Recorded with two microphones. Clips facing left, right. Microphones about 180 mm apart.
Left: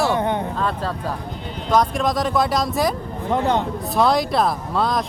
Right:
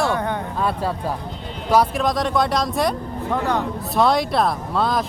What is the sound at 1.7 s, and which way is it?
Speech, 5° right (ahead or behind).